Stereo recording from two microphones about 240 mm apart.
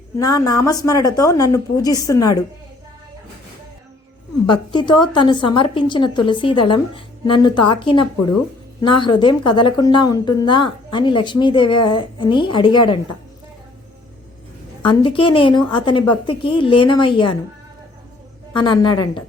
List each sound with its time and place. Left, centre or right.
0.2 s speech: centre
4.4 s a woman's voice: centre
14.8 s a woman's voice: left
18.5 s a woman's voice: centre